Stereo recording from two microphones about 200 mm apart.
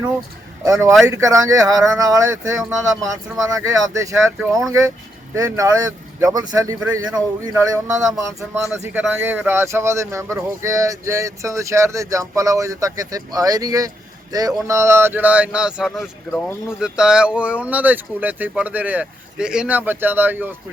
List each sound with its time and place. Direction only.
0.6 s speech: 15° right (ahead or behind)